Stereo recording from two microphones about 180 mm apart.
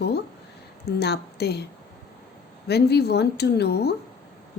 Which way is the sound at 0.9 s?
65° left (ahead or behind).